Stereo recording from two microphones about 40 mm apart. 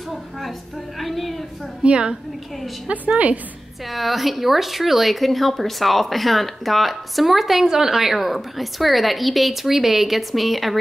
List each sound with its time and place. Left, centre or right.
0.1 s a sound: centre
1.8 s a woman's voice: right
3.8 s speech: centre